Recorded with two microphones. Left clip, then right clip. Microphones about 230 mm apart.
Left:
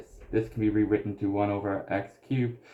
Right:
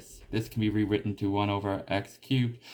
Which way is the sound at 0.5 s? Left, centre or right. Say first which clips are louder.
Left 2 dB; right.